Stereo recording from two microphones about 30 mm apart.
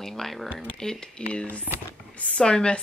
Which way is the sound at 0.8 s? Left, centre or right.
Left.